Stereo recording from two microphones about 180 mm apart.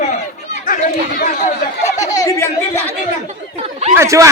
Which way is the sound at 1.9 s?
40° left (ahead or behind).